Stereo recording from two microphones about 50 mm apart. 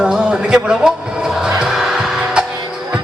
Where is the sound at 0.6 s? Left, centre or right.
Centre.